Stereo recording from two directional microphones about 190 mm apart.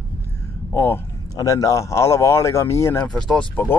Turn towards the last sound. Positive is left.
turn(degrees=10)  # may be behind; listen again after turning